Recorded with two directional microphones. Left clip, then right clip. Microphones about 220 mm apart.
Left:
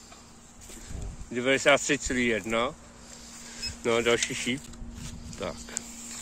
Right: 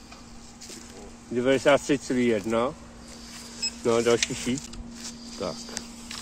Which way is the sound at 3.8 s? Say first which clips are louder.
Right 2 dB; 15° left (ahead or behind).